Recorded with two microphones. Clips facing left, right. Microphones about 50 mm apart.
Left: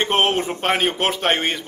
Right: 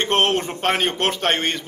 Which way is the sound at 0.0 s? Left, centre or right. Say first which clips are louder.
Even; centre.